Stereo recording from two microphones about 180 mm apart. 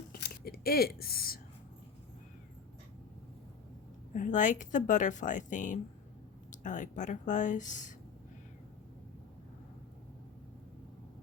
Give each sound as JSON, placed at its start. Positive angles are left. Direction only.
{"t": 0.1, "sound": "scissors", "side_deg": 55}
{"t": 4.1, "sound": "a woman's voice", "side_deg": 45}